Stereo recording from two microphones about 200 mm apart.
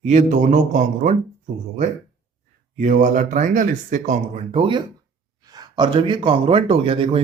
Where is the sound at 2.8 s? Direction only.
40° right (ahead or behind).